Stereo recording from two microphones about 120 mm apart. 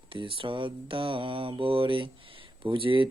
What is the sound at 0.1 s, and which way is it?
Mantra, 45° right (ahead or behind).